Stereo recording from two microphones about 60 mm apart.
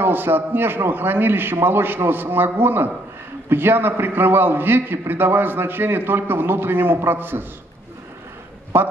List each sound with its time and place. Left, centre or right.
0.0 s a man's voice: right
8.7 s a man's voice: right